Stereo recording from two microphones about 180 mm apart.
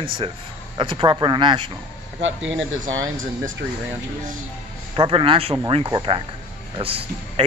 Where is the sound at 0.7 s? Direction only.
25° right (ahead or behind).